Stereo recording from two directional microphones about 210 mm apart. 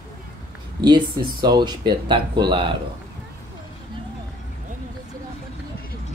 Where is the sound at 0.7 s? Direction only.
20° right (ahead or behind).